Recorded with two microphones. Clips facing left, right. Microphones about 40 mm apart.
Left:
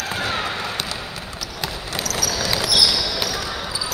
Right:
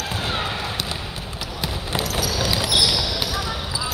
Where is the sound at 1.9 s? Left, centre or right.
Right.